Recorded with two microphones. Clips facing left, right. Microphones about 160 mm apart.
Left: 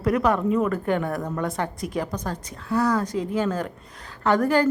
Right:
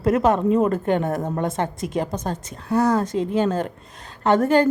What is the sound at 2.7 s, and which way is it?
Speech, 45° right (ahead or behind).